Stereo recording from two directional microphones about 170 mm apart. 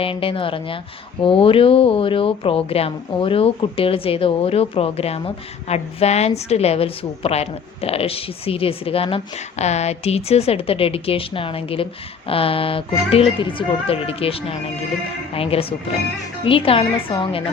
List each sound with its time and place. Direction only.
0.0 s speech: 35° left (ahead or behind)